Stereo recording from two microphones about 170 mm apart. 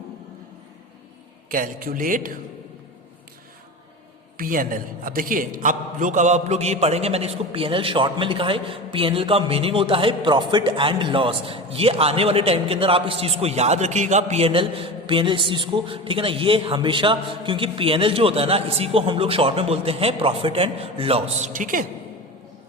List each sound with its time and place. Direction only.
1.5 s a man's voice: 55° right (ahead or behind)
4.4 s a man's voice: 55° right (ahead or behind)